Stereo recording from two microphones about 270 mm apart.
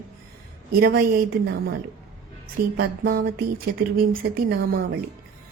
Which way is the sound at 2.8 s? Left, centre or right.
Right.